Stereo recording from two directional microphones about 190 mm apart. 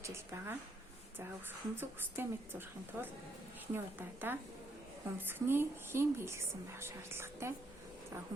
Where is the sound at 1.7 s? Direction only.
10° right (ahead or behind).